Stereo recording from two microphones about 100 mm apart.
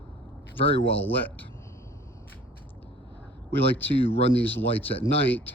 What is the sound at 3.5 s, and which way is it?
Speech, 20° left (ahead or behind).